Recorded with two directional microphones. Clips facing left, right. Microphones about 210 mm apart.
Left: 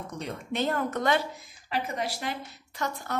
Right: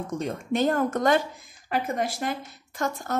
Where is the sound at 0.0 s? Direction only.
45° right (ahead or behind).